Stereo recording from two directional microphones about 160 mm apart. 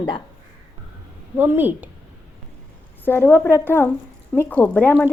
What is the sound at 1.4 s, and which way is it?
Speech, 10° right (ahead or behind).